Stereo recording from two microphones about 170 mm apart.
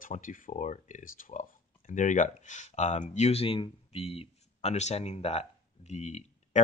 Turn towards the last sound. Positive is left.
turn(degrees=40)  # may be behind; listen again after turning